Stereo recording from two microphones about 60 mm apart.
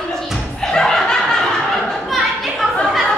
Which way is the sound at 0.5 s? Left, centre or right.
Centre.